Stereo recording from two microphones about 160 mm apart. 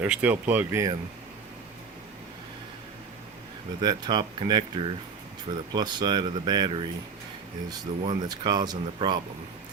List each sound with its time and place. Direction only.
0.1 s speech: 10° right (ahead or behind)
3.8 s speech: 25° right (ahead or behind)